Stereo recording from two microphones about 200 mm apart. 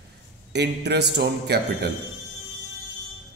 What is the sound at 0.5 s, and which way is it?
A man's voice, 55° right (ahead or behind).